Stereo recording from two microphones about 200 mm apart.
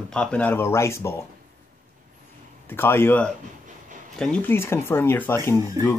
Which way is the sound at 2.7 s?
10° left (ahead or behind).